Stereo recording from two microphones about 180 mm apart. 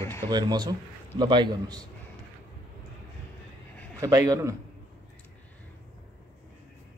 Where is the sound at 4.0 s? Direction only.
20° right (ahead or behind).